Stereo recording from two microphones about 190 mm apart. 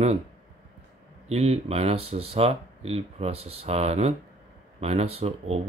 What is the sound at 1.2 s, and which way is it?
Speech, 35° right (ahead or behind).